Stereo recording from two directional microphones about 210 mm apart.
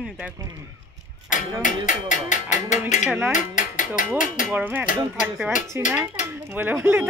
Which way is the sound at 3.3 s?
35° left (ahead or behind).